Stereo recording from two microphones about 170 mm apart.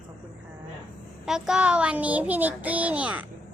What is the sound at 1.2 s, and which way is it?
A child's voice, 5° right (ahead or behind).